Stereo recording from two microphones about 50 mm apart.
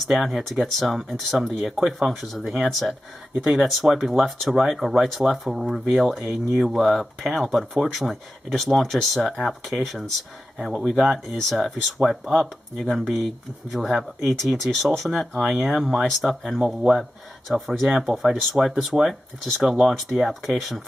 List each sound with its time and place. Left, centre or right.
0.1 s speech: centre